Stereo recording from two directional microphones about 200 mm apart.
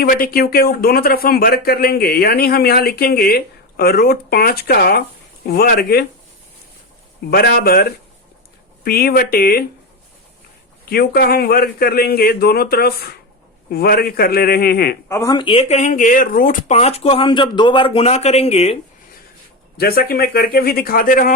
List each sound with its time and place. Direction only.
0.0 s speech: 45° left (ahead or behind)
7.3 s speech: 50° left (ahead or behind)
10.8 s speech: 50° left (ahead or behind)
15.1 s speech: 15° left (ahead or behind)
19.7 s speech: 50° left (ahead or behind)